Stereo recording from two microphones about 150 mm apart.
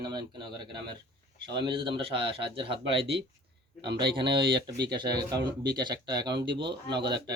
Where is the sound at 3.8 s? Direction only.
90° right.